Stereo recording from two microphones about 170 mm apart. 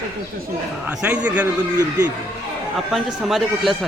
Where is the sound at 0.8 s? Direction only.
5° right (ahead or behind).